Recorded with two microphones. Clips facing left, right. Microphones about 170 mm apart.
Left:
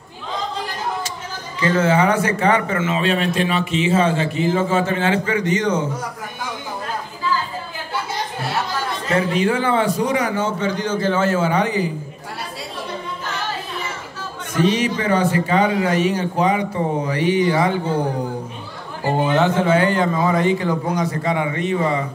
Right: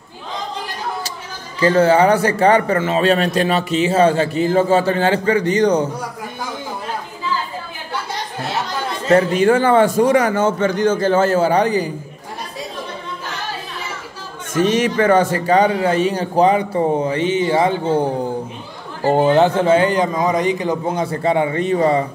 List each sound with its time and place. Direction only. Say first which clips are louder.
1.6 s a man's voice: right 4 dB; 35° right (ahead or behind)
9.1 s a man's voice: right 6 dB; 45° right (ahead or behind)
14.6 s a man's voice: right 3 dB; 50° right (ahead or behind); by 17.9 s 25° right (ahead or behind)
19.1 s a man's voice: right 4 dB; 35° right (ahead or behind)